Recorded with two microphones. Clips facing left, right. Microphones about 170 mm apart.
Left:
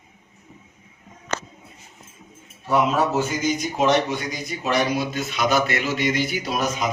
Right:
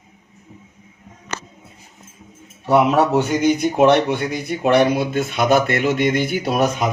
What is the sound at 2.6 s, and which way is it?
Speech, 65° right (ahead or behind).